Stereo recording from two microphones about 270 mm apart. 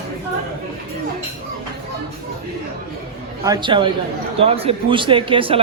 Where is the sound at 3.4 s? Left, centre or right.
Centre.